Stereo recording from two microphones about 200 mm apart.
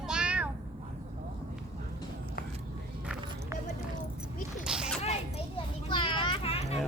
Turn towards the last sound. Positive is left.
turn(degrees=30)  # may be behind; listen again after turning